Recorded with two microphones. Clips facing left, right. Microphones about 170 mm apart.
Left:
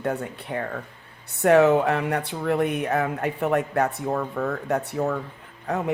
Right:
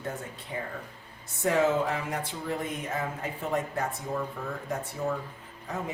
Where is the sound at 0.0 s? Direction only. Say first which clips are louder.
Left 9 dB; 65° left (ahead or behind).